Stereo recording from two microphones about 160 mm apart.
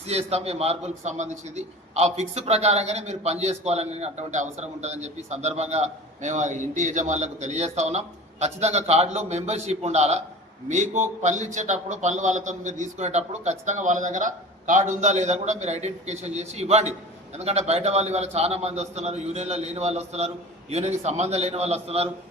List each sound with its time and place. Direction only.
0.1 s a man's voice: 40° right (ahead or behind)